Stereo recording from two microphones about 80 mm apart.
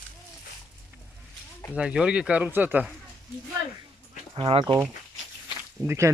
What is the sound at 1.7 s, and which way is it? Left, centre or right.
Speech, centre.